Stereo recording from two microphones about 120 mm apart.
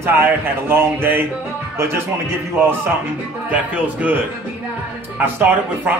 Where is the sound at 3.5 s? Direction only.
10° right (ahead or behind).